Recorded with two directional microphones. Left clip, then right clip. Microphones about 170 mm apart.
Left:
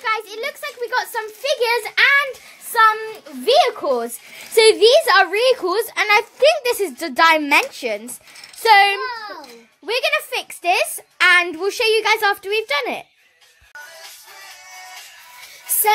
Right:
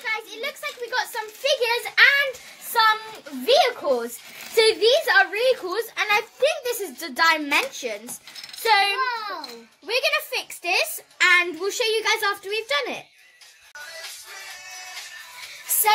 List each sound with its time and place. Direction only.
0.0 s a sound: 60° left (ahead or behind)
3.4 s a woman's voice: 55° left (ahead or behind)
4.6 s a woman's voice: 40° left (ahead or behind)
9.0 s a child's voice: 10° right (ahead or behind)
9.8 s a child's voice: 45° left (ahead or behind)